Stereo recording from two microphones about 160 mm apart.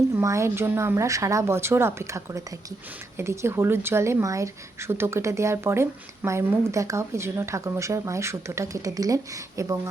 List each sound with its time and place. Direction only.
0.2 s speech: 15° right (ahead or behind)